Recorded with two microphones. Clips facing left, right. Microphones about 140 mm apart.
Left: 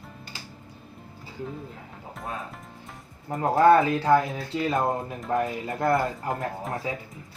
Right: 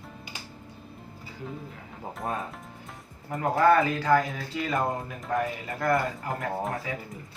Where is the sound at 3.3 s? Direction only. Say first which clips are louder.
Left 3 dB; 30° left (ahead or behind).